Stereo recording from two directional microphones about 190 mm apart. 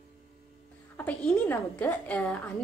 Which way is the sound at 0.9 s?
10° left (ahead or behind).